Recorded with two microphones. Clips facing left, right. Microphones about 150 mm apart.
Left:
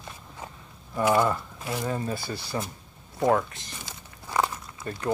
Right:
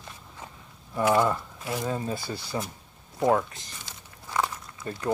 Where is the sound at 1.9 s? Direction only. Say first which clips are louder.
Even; 20° right (ahead or behind).